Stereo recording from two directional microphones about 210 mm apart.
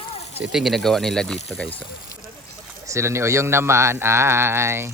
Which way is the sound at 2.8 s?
15° right (ahead or behind).